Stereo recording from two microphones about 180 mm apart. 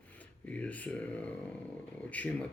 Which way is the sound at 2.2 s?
10° left (ahead or behind).